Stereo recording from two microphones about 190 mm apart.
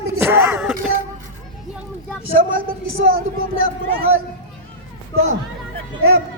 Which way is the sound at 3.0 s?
50° right (ahead or behind).